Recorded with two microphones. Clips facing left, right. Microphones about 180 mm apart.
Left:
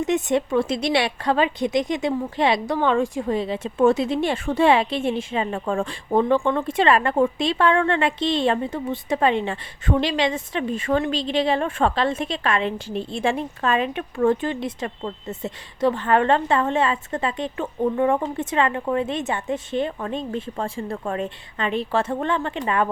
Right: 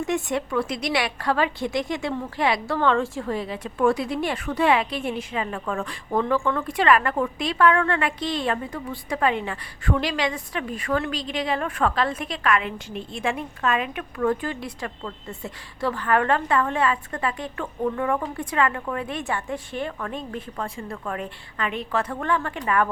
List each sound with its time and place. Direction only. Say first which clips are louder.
0.0 s a woman's voice: left 4 dB; 20° left (ahead or behind)